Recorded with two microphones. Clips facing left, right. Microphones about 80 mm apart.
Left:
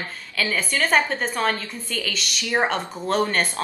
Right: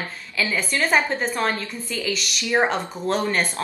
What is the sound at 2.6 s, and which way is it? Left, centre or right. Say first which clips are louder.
Speech: right 1 dB; centre.